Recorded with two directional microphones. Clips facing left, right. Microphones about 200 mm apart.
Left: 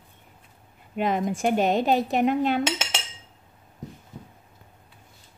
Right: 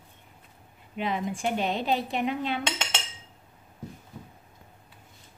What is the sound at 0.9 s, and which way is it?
A woman's voice, 45° left (ahead or behind).